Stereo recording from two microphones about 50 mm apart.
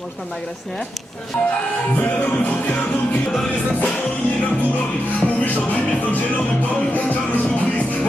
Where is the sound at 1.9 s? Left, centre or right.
Left.